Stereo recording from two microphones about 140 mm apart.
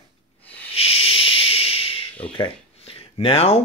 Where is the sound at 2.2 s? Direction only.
40° left (ahead or behind).